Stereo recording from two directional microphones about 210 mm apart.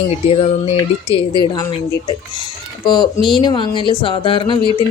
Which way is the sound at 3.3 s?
20° left (ahead or behind).